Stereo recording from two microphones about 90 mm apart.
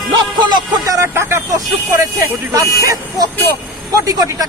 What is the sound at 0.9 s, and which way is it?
Speech, 30° right (ahead or behind).